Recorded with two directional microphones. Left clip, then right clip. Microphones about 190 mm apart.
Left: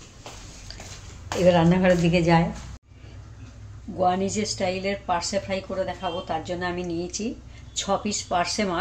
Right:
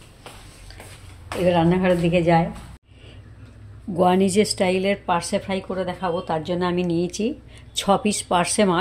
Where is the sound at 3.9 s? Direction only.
60° right (ahead or behind).